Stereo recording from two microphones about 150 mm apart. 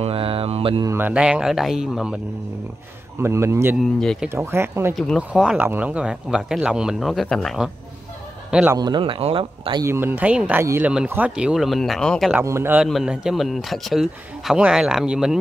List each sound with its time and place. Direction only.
0.0 s mantra: 40° right (ahead or behind)
0.8 s speech: 15° right (ahead or behind)
3.2 s speech: 15° right (ahead or behind)
3.8 s speech: centre (ahead or behind)
4.3 s speech: 15° right (ahead or behind)
4.9 s speech: centre (ahead or behind)
8.7 s speech: 30° right (ahead or behind)
9.8 s speech: 15° right (ahead or behind); by 12.3 s 5° left (ahead or behind)
12.3 s speech: 15° right (ahead or behind)
12.8 s speech: 5° right (ahead or behind)